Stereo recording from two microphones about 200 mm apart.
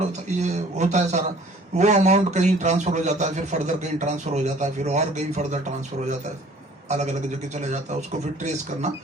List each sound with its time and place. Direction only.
0.0 s a man's voice: 35° right (ahead or behind)
6.8 s a man's voice: 35° right (ahead or behind)